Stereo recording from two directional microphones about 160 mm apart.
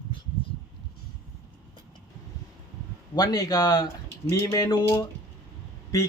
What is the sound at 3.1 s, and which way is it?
Speech, 25° left (ahead or behind).